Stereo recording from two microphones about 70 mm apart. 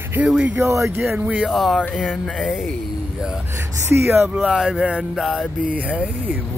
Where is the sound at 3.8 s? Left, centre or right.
Right.